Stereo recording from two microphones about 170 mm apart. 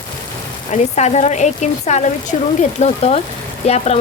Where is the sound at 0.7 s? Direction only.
40° left (ahead or behind).